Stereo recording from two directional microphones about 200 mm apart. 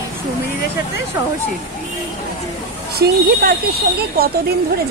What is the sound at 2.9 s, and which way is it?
Speech, 50° right (ahead or behind).